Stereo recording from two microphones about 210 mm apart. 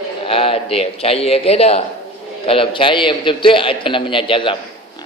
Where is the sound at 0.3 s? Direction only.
25° left (ahead or behind).